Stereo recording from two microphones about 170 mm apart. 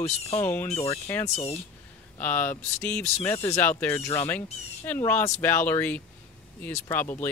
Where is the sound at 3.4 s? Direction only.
20° left (ahead or behind).